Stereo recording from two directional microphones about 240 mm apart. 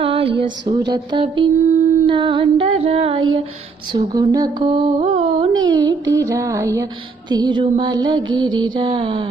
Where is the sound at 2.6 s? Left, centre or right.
Right.